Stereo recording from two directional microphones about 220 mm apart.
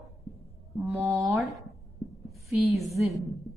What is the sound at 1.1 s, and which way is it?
Speech, centre (ahead or behind).